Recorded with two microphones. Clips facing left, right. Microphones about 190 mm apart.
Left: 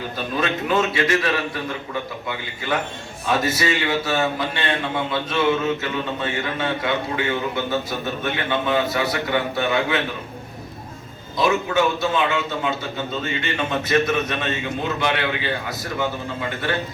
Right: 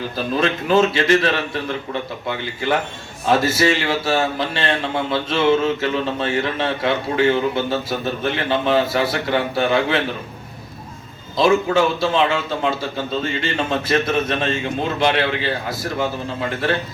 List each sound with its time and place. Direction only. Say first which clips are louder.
0.3 s a man's voice: right 4 dB; 30° right (ahead or behind)
11.3 s a man's voice: right 4 dB; 30° right (ahead or behind)